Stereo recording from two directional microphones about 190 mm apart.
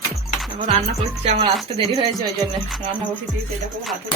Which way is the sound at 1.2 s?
35° right (ahead or behind).